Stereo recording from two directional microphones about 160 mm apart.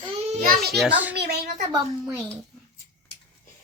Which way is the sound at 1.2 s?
90° right.